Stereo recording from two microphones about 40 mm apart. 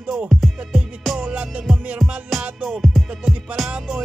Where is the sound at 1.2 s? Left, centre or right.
Right.